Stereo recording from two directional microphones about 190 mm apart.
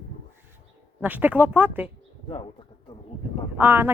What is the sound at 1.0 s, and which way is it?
Speech, 10° right (ahead or behind).